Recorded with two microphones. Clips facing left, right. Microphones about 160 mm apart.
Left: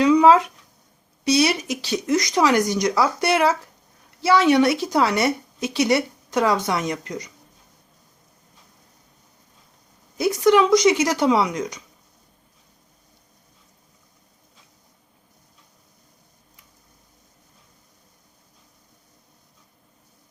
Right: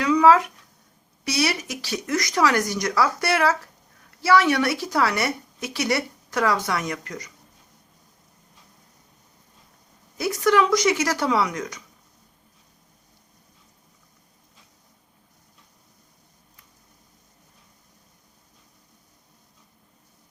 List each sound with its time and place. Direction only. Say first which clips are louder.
0.0 s a sound: left 3 dB; 20° left (ahead or behind)
1.2 s a woman's voice: left 6 dB; 20° left (ahead or behind)
10.2 s a woman's voice: left 3 dB; 20° left (ahead or behind)